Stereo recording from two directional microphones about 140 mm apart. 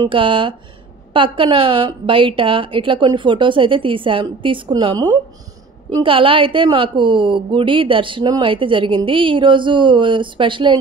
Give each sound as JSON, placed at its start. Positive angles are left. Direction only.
{"t": 0.0, "sound": "a woman's voice", "side_deg": -35}